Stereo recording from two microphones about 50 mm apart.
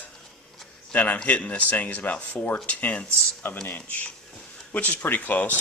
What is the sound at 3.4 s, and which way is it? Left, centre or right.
Speech, left.